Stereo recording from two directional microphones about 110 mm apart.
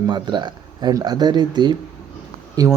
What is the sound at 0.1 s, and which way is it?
Speech, 45° right (ahead or behind).